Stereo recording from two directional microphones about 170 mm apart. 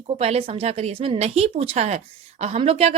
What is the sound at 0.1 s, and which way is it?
Speech, 35° right (ahead or behind).